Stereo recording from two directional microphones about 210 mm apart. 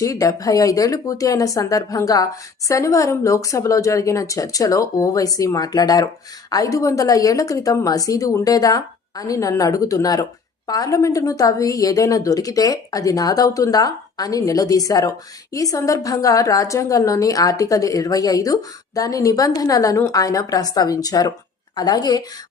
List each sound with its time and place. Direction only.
0.0 s a woman's voice: 15° left (ahead or behind)